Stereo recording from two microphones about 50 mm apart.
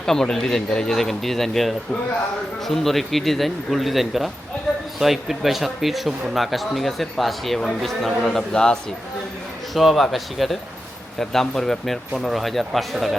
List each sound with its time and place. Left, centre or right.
0.0 s speech: centre
8.3 s speech: centre
9.7 s speech: centre